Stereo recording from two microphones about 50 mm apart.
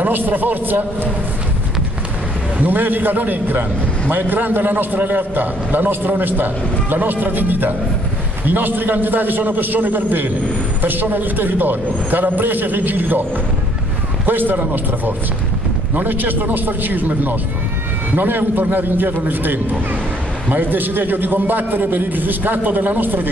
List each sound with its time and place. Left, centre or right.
0.0 s a man's voice: right
2.6 s a man's voice: right
14.2 s a man's voice: right